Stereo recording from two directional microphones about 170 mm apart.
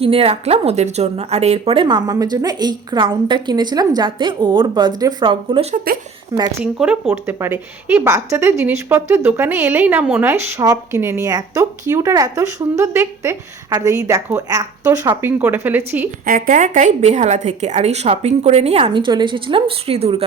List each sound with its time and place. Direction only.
0.0 s a woman's voice: 35° right (ahead or behind)
5.7 s speech: 60° right (ahead or behind)
6.3 s a woman's voice: 20° right (ahead or behind)
6.7 s speech: centre (ahead or behind)
7.1 s speech: 15° right (ahead or behind)
16.2 s a woman's voice: 50° right (ahead or behind)